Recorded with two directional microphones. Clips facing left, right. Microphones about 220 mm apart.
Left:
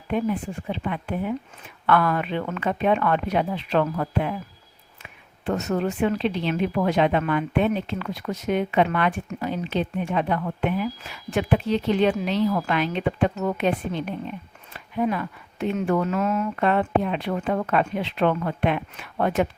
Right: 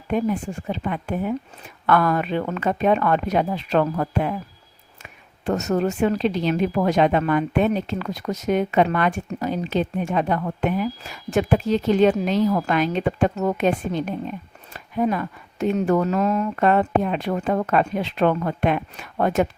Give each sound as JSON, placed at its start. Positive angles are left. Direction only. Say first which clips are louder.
{"t": 0.1, "sound": "speech", "louder": "right 2 dB", "side_deg": -45}
{"t": 5.5, "sound": "speech", "louder": "right 3 dB", "side_deg": -45}